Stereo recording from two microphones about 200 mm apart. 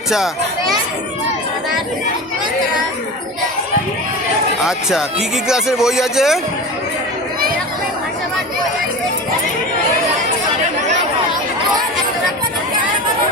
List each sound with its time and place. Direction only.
4.6 s speech: centre (ahead or behind)